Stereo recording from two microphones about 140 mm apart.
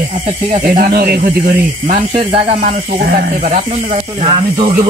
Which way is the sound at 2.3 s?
40° right (ahead or behind).